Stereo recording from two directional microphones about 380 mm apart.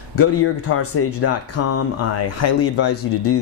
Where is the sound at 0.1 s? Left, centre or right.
Left.